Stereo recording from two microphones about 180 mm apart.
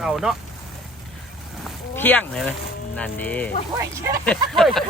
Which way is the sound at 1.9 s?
10° left (ahead or behind).